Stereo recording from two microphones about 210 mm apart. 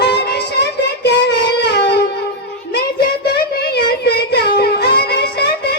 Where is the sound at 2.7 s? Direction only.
50° left (ahead or behind).